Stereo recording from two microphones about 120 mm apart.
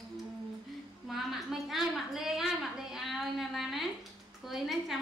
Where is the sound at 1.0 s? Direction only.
Centre (ahead or behind).